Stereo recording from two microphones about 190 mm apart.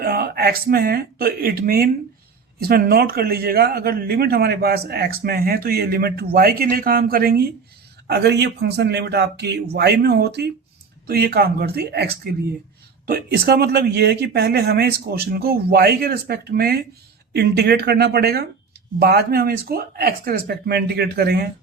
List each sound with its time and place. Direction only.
0.0 s speech: 55° right (ahead or behind)